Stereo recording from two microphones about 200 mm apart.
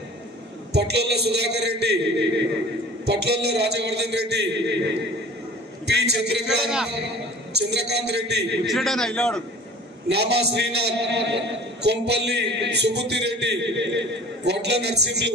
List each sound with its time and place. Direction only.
0.7 s a man's voice: 55° right (ahead or behind)
6.6 s a man's voice: 5° right (ahead or behind)
7.5 s a man's voice: 55° right (ahead or behind)
8.6 s a man's voice: centre (ahead or behind)
10.0 s a man's voice: 55° right (ahead or behind)